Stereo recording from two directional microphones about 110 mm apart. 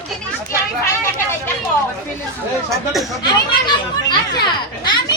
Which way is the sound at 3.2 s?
40° left (ahead or behind).